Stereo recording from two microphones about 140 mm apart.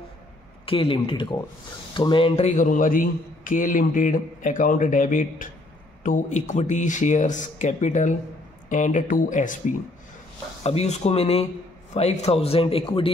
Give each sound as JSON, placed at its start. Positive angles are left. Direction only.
{"t": 0.7, "sound": "a man's voice", "side_deg": 40}
{"t": 10.6, "sound": "a man's voice", "side_deg": 50}